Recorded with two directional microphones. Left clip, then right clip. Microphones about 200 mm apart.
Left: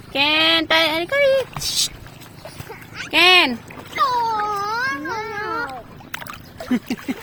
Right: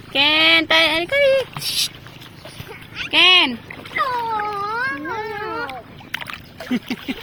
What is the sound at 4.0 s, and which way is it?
Cat, 25° left (ahead or behind).